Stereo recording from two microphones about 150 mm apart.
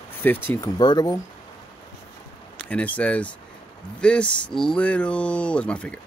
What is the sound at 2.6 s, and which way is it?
Speech, 10° left (ahead or behind).